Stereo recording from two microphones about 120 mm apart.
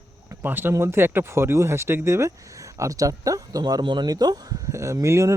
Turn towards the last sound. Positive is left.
turn(degrees=-25)  # may be behind; listen again after turning